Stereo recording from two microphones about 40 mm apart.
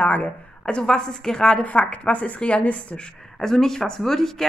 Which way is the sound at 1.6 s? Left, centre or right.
Left.